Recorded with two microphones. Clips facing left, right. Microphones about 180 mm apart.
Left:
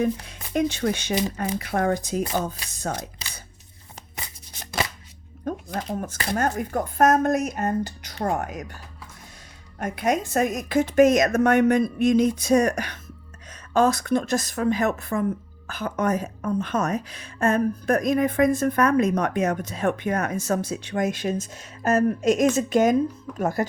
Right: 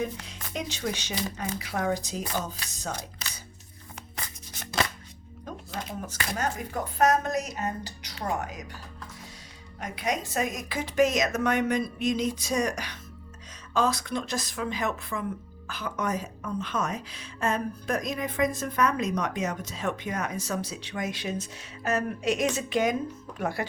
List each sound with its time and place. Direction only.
0.0 s speech: 55° left (ahead or behind)
5.5 s music: 50° left (ahead or behind)
6.3 s speech: 50° left (ahead or behind)
9.8 s speech: 50° left (ahead or behind)